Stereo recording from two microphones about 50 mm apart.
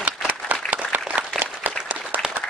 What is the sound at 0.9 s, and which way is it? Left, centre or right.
Applause, right.